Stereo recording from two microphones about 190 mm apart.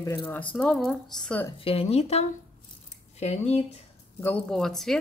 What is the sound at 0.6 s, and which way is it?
Speech, centre (ahead or behind).